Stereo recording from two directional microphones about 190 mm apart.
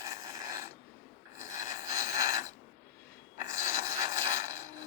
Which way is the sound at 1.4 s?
15° right (ahead or behind).